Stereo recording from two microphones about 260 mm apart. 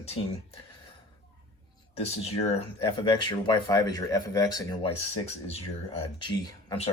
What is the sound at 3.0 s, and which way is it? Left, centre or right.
Speech, centre.